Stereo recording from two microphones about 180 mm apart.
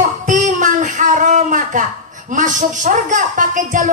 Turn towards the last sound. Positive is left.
turn(degrees=-45)  # may be behind; listen again after turning